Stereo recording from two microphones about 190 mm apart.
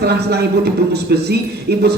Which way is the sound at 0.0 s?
60° right (ahead or behind).